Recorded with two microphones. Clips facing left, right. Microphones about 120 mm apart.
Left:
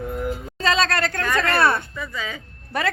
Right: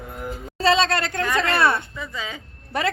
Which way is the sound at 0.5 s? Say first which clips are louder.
Right 3 dB; 30° right (ahead or behind).